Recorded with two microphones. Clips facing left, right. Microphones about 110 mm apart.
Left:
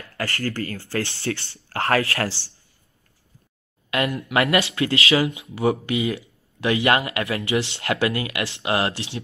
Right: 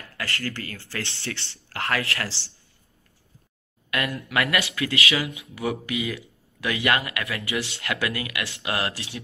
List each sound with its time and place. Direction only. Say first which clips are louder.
0.2 s speech: left 5 dB; 35° left (ahead or behind)
3.9 s speech: left 4 dB; 25° left (ahead or behind)